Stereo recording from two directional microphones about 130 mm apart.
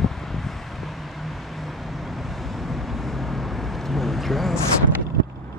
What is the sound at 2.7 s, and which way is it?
Vehicle, centre (ahead or behind).